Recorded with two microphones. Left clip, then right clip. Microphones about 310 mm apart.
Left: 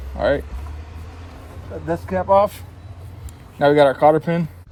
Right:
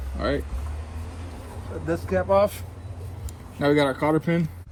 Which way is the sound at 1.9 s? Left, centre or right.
Left.